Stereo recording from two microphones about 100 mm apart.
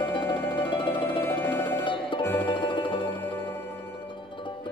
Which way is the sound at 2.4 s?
55° left (ahead or behind).